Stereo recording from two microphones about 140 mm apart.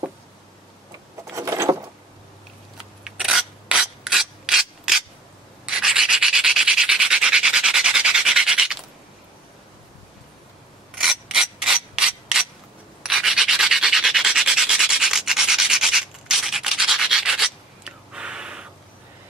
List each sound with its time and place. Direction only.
1.3 s keys jangling: 20° right (ahead or behind)
3.0 s filing: 5° right (ahead or behind)
5.7 s rub: 5° right (ahead or behind)
11.0 s mechanisms: 5° right (ahead or behind)
13.0 s rub: 5° right (ahead or behind)